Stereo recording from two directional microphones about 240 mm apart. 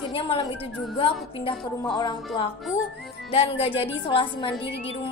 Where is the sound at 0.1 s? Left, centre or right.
Left.